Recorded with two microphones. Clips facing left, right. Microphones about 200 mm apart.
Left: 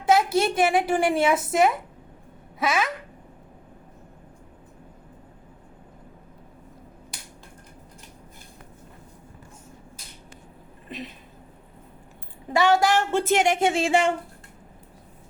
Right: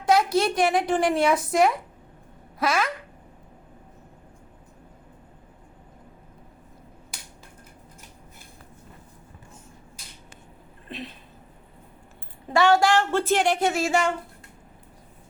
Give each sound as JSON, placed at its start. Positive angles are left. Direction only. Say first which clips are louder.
{"t": 0.0, "sound": "speech", "louder": "even", "side_deg": 5}
{"t": 12.5, "sound": "a woman's voice", "louder": "right 1 dB", "side_deg": 20}